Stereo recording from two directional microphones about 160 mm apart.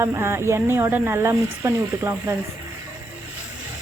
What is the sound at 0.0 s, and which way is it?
Speech, 15° right (ahead or behind).